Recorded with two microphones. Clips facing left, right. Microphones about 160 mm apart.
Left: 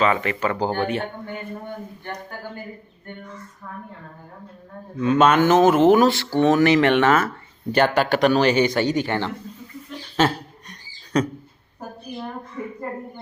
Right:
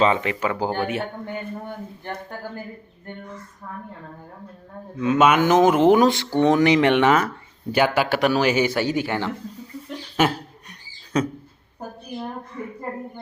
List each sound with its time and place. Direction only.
0.0 s speech: 20° right (ahead or behind)
4.9 s speech: 10° right (ahead or behind)
10.2 s a sound: 10° right (ahead or behind)